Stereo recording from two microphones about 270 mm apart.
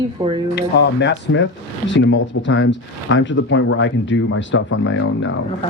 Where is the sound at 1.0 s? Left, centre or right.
Left.